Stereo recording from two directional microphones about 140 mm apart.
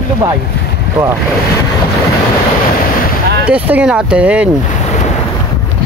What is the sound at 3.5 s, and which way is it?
Speech, 10° right (ahead or behind).